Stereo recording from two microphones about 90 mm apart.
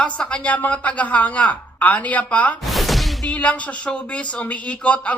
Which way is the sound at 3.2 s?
15° left (ahead or behind).